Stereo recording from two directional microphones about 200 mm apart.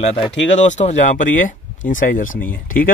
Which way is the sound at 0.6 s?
35° left (ahead or behind).